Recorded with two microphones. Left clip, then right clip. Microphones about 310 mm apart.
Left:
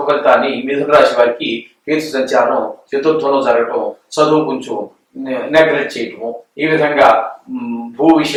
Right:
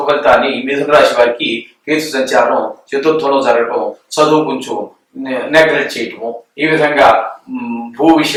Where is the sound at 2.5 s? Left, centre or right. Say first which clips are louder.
Right 2 dB; centre.